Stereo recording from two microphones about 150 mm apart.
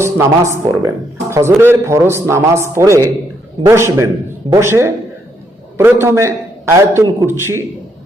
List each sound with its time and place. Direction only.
0.0 s a man's voice: 20° right (ahead or behind)